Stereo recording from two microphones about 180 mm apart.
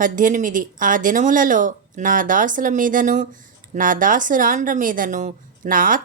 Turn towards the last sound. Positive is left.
turn(degrees=-50)  # may be behind; listen again after turning